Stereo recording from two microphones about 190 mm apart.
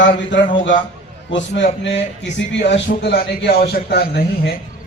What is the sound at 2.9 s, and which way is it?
A man's voice, 55° left (ahead or behind).